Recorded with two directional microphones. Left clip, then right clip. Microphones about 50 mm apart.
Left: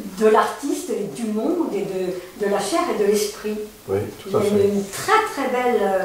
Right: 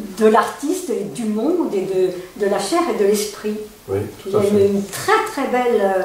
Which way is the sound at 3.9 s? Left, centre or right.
Centre.